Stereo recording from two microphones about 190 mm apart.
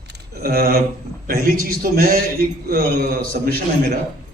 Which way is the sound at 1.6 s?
50° right (ahead or behind).